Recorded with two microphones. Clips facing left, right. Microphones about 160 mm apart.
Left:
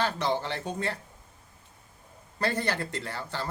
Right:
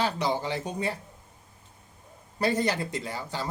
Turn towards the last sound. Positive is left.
turn(degrees=-15)  # may be behind; listen again after turning